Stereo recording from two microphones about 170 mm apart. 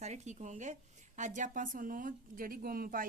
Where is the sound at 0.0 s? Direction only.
45° right (ahead or behind).